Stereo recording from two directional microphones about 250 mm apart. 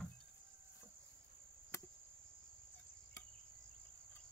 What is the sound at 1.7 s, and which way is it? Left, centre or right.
Cricket, centre.